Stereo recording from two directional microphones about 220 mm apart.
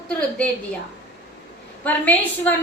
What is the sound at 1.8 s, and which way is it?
Speech, 5° left (ahead or behind).